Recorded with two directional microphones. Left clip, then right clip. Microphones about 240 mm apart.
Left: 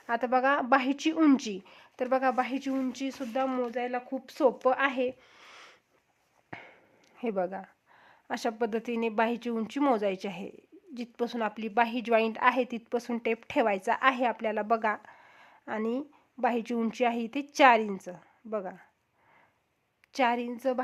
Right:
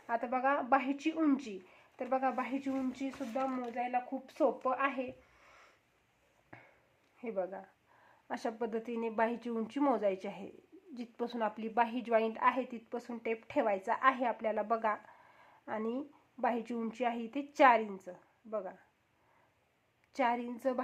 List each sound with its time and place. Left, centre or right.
0.1 s speech: left
6.5 s a sound: left
7.2 s speech: left
20.1 s speech: left